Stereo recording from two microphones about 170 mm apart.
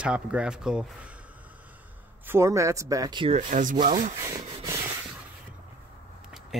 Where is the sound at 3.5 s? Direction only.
50° right (ahead or behind).